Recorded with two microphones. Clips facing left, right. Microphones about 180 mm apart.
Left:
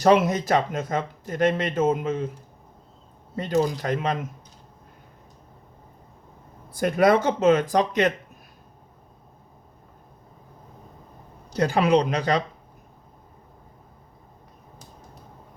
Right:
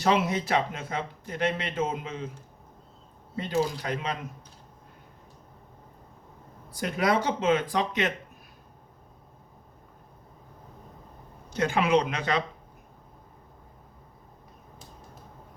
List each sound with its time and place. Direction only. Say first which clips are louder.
0.0 s speech: left 6 dB; 45° left (ahead or behind)
3.3 s speech: left 4 dB; 45° left (ahead or behind)
6.7 s speech: left 7 dB; 50° left (ahead or behind)
11.5 s speech: left 4 dB; 35° left (ahead or behind)